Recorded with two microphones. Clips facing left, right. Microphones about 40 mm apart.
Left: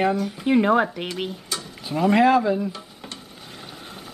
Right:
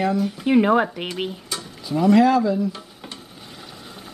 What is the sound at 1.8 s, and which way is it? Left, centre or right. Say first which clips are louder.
Speech: right 2 dB; centre.